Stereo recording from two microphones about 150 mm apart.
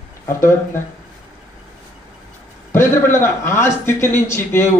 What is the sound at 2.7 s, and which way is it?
A man's voice, 15° left (ahead or behind).